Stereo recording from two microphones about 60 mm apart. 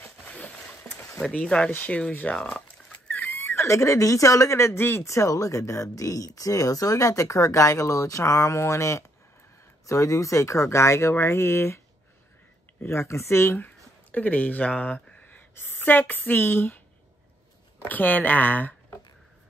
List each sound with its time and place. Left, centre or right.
1.4 s speech: centre
2.3 s a sound: left
3.5 s speech: left
12.8 s speech: left
14.1 s speech: left
17.8 s speech: left